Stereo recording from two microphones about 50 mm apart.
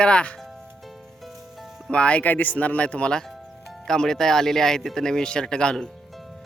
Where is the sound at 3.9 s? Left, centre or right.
Centre.